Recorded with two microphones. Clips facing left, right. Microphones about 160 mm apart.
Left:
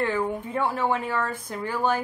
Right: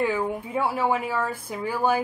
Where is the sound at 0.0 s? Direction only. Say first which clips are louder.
Right 1 dB; 10° right (ahead or behind).